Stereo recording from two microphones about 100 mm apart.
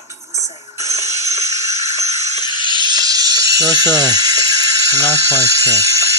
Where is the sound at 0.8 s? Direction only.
30° right (ahead or behind).